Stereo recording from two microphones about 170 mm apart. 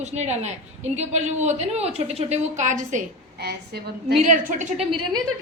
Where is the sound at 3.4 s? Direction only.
70° right (ahead or behind).